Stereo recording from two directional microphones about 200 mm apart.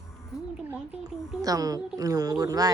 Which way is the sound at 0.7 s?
5° right (ahead or behind).